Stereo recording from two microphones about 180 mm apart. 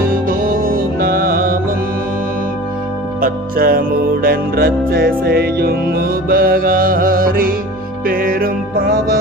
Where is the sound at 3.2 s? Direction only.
55° right (ahead or behind).